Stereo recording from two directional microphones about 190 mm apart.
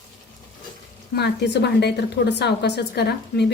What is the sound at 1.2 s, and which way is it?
A woman's voice, 60° left (ahead or behind).